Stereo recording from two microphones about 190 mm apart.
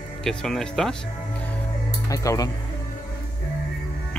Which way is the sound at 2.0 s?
20° left (ahead or behind).